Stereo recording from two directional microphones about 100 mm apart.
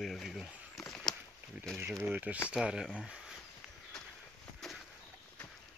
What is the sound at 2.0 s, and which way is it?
Speech, 15° right (ahead or behind).